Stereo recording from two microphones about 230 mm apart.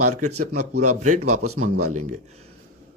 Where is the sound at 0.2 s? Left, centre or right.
Right.